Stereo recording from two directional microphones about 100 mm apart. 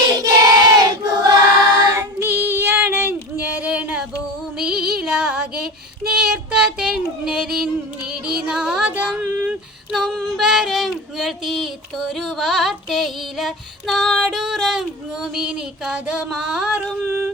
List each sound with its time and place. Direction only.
0.1 s choir: 35° right (ahead or behind)
1.9 s female singing: 25° right (ahead or behind)
4.5 s music: 10° right (ahead or behind)
6.1 s child singing: 10° right (ahead or behind)
8.4 s music: 5° right (ahead or behind)
8.9 s a sound: 10° right (ahead or behind)
9.5 s female singing: 5° right (ahead or behind)